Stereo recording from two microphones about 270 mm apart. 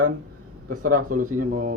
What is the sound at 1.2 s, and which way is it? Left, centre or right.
Speech, right.